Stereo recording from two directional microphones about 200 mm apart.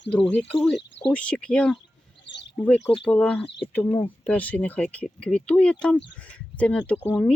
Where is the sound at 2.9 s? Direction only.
25° left (ahead or behind).